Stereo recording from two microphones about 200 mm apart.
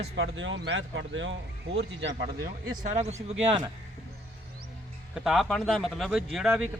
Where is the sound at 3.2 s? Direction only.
20° right (ahead or behind).